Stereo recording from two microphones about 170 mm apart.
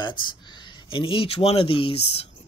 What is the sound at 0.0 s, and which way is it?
Speech, 25° left (ahead or behind).